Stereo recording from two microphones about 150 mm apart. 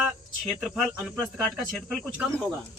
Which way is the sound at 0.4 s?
Centre (ahead or behind).